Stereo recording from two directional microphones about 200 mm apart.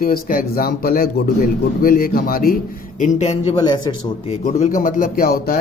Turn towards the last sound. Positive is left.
turn(degrees=50)  # may be behind; listen again after turning